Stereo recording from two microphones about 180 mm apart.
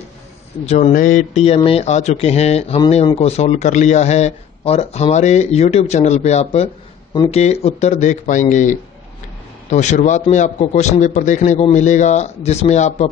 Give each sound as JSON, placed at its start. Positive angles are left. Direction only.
{"t": 0.7, "sound": "speech", "side_deg": 40}